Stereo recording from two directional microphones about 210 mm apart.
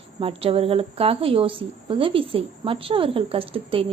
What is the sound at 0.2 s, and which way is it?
A woman's voice, 25° right (ahead or behind).